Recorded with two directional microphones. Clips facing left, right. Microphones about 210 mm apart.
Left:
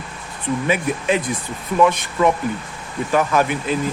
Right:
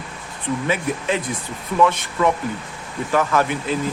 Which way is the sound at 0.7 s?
15° left (ahead or behind).